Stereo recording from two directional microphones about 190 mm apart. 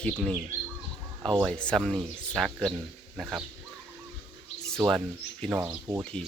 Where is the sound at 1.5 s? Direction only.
5° left (ahead or behind).